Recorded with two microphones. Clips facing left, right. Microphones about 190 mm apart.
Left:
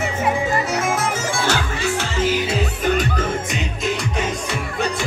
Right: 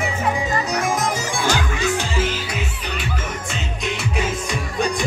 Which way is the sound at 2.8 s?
45° left (ahead or behind).